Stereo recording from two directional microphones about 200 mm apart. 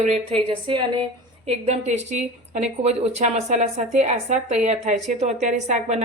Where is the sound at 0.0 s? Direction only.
30° right (ahead or behind).